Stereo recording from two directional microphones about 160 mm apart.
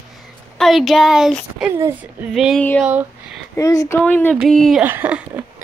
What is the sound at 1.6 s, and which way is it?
Speech, 15° right (ahead or behind).